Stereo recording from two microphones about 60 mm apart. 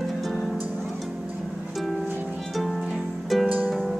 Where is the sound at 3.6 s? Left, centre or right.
Centre.